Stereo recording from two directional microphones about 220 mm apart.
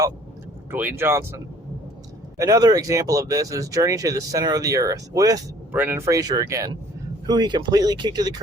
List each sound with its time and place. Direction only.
0.7 s speech: 10° right (ahead or behind)
2.4 s speech: 15° right (ahead or behind)